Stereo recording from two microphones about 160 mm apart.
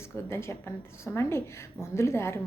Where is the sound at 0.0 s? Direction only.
15° left (ahead or behind).